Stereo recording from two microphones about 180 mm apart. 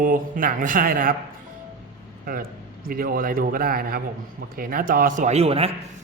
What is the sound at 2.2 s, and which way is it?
A man's voice, 55° right (ahead or behind).